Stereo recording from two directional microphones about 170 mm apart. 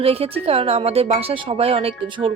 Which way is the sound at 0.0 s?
35° right (ahead or behind).